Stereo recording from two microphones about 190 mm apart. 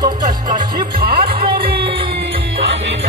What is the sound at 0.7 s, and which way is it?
Speech, 50° right (ahead or behind).